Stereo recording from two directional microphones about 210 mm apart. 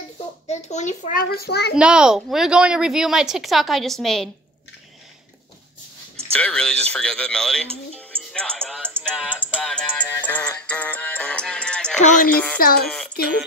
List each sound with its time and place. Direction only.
0.5 s a child's voice: 35° left (ahead or behind); by 1.7 s 50° left (ahead or behind)
1.8 s a woman's voice: 5° right (ahead or behind)
6.3 s a woman's voice: 5° left (ahead or behind)
8.3 s music: 5° left (ahead or behind)
12.0 s a sound: 35° left (ahead or behind)
12.5 s speech: 45° left (ahead or behind)
12.8 s a sound: centre (ahead or behind)